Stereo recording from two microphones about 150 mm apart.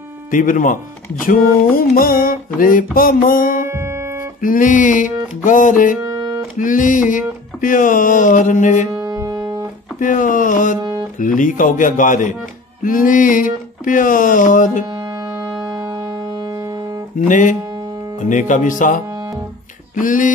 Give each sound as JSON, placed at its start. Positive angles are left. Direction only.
{"t": 0.3, "sound": "music", "side_deg": 60}
{"t": 3.6, "sound": "music", "side_deg": -15}
{"t": 4.4, "sound": "music", "side_deg": 65}
{"t": 6.0, "sound": "music", "side_deg": -25}
{"t": 6.6, "sound": "music", "side_deg": 60}
{"t": 8.9, "sound": "music", "side_deg": -25}
{"t": 9.9, "sound": "music", "side_deg": 60}
{"t": 10.8, "sound": "music", "side_deg": -25}
{"t": 11.1, "sound": "music", "side_deg": 65}
{"t": 15.0, "sound": "music", "side_deg": -25}
{"t": 17.3, "sound": "music", "side_deg": 60}
{"t": 20.0, "sound": "music", "side_deg": 60}